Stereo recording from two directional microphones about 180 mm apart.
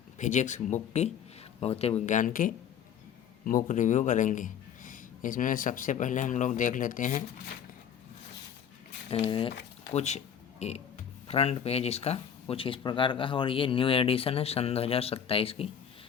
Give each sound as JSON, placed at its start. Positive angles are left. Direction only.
{"t": 0.2, "sound": "speech", "side_deg": 45}
{"t": 9.0, "sound": "speech", "side_deg": 30}